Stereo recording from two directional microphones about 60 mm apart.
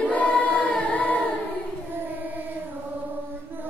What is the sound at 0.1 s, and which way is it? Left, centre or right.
Choir, left.